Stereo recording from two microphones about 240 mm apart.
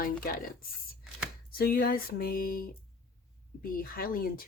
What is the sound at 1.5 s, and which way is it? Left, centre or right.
Speech, left.